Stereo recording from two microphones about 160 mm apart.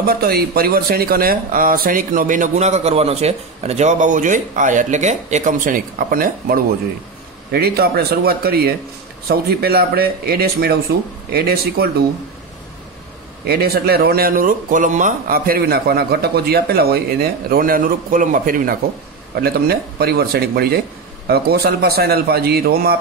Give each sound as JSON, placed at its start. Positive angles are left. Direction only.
{"t": 0.0, "sound": "speech", "side_deg": -75}
{"t": 7.5, "sound": "speech", "side_deg": -80}
{"t": 13.5, "sound": "speech", "side_deg": -75}
{"t": 19.4, "sound": "speech", "side_deg": -75}